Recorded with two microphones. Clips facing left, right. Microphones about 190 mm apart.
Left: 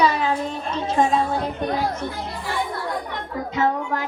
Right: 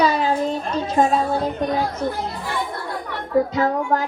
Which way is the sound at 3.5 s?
45° right (ahead or behind).